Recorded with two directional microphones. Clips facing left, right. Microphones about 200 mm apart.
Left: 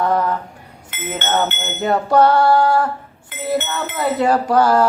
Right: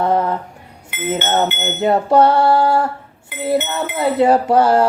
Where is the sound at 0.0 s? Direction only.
25° right (ahead or behind).